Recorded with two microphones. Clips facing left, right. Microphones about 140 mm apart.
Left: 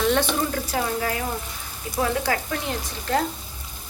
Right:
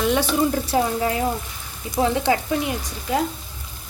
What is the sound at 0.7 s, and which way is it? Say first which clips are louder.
Speech: right 3 dB; 25° right (ahead or behind).